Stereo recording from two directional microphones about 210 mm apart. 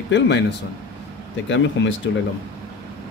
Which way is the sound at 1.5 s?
60° left (ahead or behind).